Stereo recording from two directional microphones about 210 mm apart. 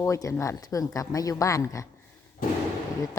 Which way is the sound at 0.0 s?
15° left (ahead or behind).